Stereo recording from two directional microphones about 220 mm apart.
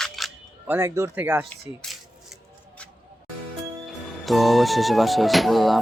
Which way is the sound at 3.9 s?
Centre (ahead or behind).